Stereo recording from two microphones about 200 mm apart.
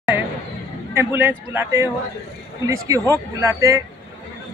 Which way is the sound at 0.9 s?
10° right (ahead or behind).